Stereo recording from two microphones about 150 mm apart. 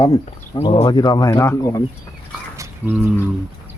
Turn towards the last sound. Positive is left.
turn(degrees=-10)  # may be behind; listen again after turning